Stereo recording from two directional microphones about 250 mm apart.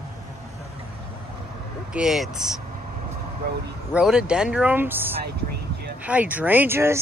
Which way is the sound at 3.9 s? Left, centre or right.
Centre.